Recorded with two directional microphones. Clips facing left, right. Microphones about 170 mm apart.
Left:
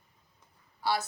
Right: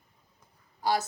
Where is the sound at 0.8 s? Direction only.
45° right (ahead or behind).